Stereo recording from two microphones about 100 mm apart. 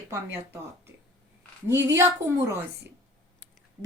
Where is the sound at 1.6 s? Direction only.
30° right (ahead or behind).